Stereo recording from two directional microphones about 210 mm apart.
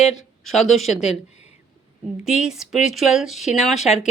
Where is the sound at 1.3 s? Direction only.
30° left (ahead or behind).